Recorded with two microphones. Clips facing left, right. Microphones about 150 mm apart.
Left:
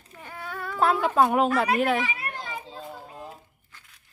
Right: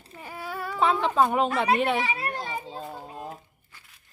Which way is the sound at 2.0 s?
30° right (ahead or behind).